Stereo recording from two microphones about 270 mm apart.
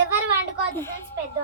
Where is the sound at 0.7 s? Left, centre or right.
Centre.